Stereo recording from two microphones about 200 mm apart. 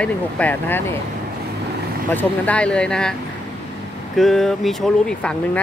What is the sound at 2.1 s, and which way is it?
Speech, 5° left (ahead or behind).